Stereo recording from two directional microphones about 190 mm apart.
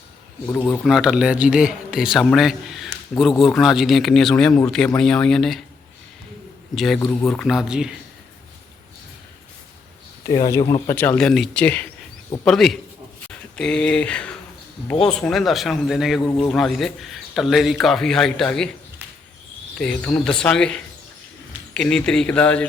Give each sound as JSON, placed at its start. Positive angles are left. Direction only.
{"t": 0.4, "sound": "speech", "side_deg": 10}
{"t": 0.9, "sound": "speech", "side_deg": -5}
{"t": 6.7, "sound": "speech", "side_deg": 0}
{"t": 10.2, "sound": "speech", "side_deg": 15}
{"t": 19.8, "sound": "speech", "side_deg": 5}